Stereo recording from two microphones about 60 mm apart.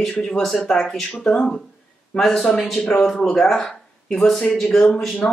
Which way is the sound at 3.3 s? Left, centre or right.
Centre.